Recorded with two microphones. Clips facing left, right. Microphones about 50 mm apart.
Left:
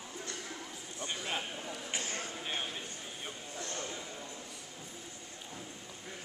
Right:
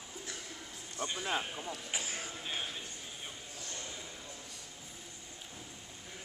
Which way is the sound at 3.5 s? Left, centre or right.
Left.